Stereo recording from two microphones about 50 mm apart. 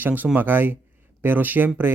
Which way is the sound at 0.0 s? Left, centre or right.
Right.